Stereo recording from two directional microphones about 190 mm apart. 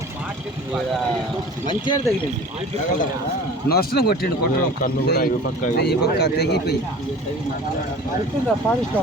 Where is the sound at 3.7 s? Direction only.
55° left (ahead or behind).